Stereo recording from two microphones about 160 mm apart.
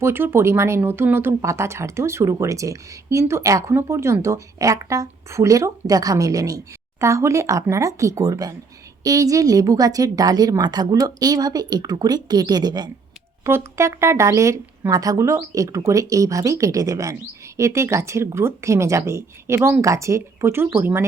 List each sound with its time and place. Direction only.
0.0 s speech: 15° right (ahead or behind)